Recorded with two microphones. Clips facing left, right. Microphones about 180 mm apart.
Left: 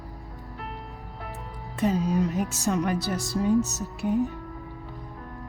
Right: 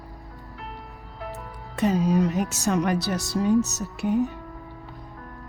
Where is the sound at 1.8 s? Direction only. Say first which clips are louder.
Right 3 dB; 75° right (ahead or behind).